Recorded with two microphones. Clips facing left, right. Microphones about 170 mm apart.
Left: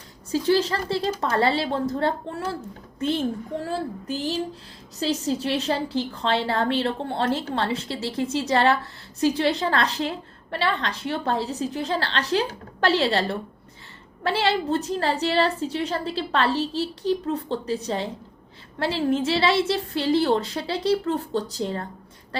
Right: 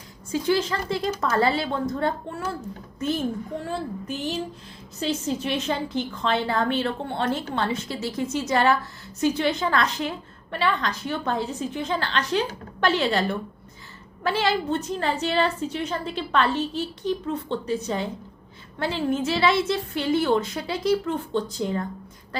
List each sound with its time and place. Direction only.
0.3 s a woman's voice: 35° left (ahead or behind)